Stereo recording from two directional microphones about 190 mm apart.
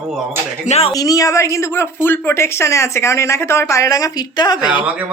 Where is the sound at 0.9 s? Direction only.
20° left (ahead or behind).